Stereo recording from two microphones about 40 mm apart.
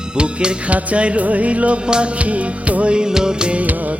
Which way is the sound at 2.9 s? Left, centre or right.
Centre.